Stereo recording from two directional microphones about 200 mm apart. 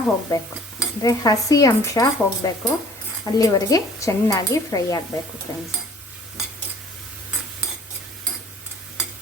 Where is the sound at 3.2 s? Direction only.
20° left (ahead or behind).